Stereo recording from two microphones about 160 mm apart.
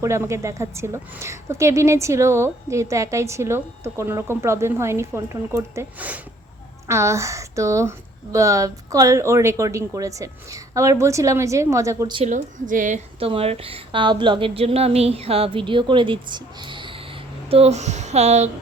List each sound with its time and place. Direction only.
0.0 s a woman's voice: 15° right (ahead or behind)
12.3 s speech: 55° right (ahead or behind)
13.1 s a woman's voice: 35° right (ahead or behind)
17.5 s speech: 40° right (ahead or behind)